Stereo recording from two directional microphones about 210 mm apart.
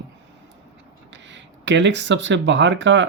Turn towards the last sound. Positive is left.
turn(degrees=-60)  # may be behind; listen again after turning